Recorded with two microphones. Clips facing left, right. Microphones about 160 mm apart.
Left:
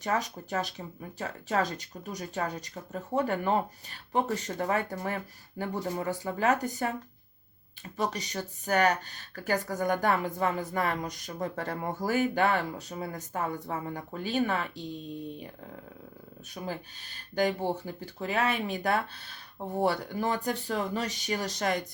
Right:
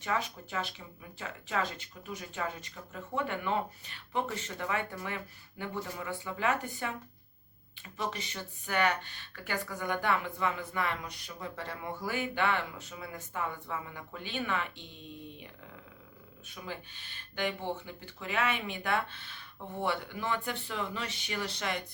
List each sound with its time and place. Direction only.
0.0 s speech: 40° left (ahead or behind)
7.9 s speech: 40° left (ahead or behind)
16.6 s speech: 40° left (ahead or behind)